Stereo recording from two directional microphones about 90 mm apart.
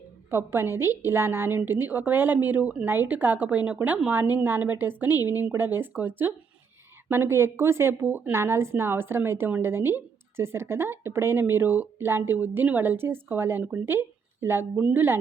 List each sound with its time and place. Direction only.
0.3 s a woman's voice: 25° right (ahead or behind)